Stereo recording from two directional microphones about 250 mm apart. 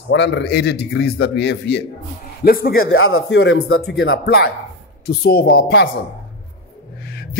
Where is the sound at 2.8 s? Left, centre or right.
Left.